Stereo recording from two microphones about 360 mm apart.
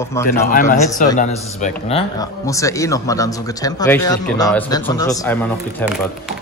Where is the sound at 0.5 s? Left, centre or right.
Left.